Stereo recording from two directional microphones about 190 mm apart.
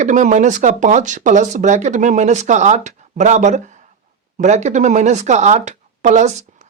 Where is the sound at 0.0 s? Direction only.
40° right (ahead or behind).